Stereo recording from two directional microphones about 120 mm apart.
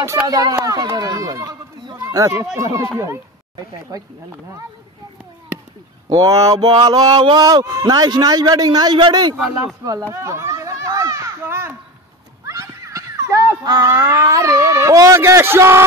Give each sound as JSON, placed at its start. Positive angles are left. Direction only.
{"t": 0.0, "sound": "a sound", "side_deg": -30}
{"t": 2.5, "sound": "speech", "side_deg": -25}
{"t": 3.9, "sound": "speech", "side_deg": -30}
{"t": 6.0, "sound": "a sound", "side_deg": -30}
{"t": 9.8, "sound": "children playing", "side_deg": -25}
{"t": 12.4, "sound": "cat", "side_deg": -25}
{"t": 13.9, "sound": "speech", "side_deg": -25}